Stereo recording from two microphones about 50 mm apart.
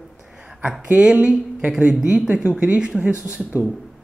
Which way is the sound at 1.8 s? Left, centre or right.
Right.